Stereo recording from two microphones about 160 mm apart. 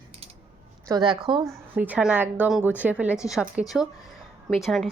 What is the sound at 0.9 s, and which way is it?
Speech, 25° right (ahead or behind).